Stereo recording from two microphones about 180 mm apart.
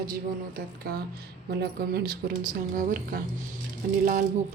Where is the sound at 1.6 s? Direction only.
60° right (ahead or behind).